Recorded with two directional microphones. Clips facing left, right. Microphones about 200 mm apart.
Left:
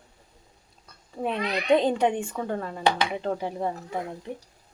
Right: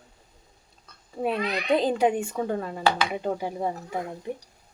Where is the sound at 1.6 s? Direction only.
5° right (ahead or behind).